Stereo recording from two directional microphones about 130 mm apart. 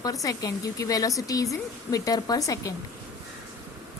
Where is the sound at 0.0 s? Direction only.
25° left (ahead or behind).